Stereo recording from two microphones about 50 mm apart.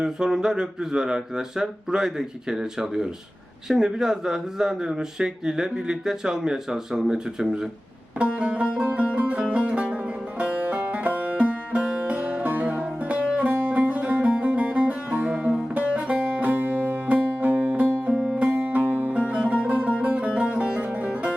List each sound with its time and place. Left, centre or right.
0.0 s speech: centre
8.2 s music: right
16.1 s music: right
17.8 s music: right
18.1 s music: centre
18.3 s music: right
19.1 s music: right